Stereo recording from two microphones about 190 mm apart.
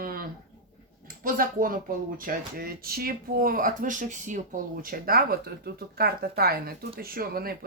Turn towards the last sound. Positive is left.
turn(degrees=-50)  # may be behind; listen again after turning